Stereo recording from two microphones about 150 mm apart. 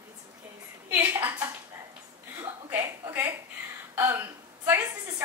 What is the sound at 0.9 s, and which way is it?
Speech, 10° right (ahead or behind).